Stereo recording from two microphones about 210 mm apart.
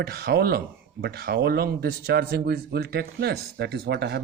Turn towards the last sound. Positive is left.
turn(degrees=-50)  # may be behind; listen again after turning